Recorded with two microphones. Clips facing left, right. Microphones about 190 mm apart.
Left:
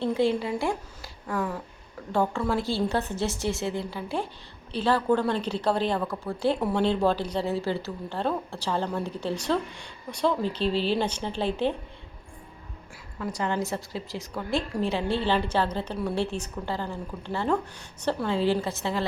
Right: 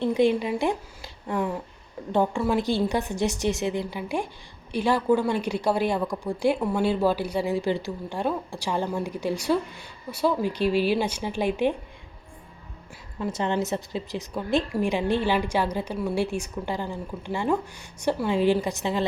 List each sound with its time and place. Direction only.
0.0 s a woman's voice: 15° right (ahead or behind)
13.1 s a woman's voice: 25° right (ahead or behind)